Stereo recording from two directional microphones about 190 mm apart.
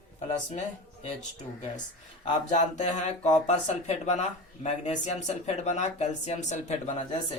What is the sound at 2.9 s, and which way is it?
Speech, 35° left (ahead or behind).